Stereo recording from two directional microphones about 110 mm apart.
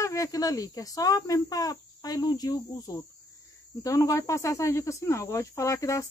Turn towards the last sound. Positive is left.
turn(degrees=30)  # may be behind; listen again after turning